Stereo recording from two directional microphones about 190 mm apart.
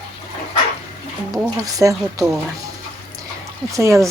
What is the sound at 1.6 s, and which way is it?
Speech, 20° right (ahead or behind).